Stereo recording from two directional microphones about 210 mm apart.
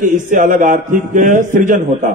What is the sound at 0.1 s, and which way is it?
Mantra, 40° right (ahead or behind).